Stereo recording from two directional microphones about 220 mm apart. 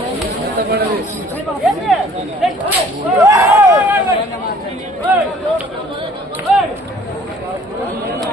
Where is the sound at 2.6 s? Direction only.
10° right (ahead or behind).